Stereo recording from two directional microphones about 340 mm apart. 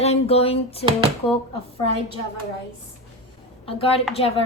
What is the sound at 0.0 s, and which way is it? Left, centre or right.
Speech, centre.